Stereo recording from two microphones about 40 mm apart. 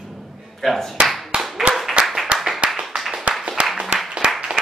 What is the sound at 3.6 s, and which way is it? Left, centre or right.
Applause, right.